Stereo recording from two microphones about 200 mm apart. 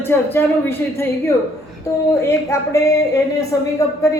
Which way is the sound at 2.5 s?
15° left (ahead or behind).